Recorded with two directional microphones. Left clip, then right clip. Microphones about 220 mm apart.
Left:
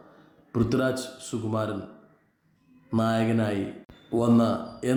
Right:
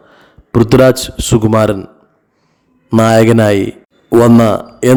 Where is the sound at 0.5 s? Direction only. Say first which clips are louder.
Right 18 dB; 45° right (ahead or behind).